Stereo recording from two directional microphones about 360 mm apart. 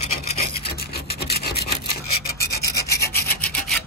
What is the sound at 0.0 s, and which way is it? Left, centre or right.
Rub, centre.